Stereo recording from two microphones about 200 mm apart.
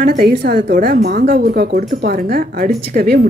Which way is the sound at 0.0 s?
45° right (ahead or behind).